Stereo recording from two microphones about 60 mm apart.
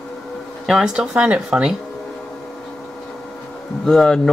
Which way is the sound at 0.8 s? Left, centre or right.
Centre.